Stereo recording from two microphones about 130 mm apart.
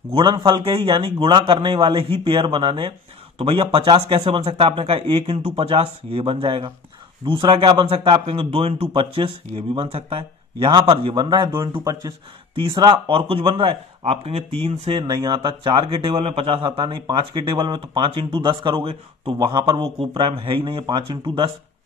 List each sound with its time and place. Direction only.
0.1 s speech: 40° right (ahead or behind)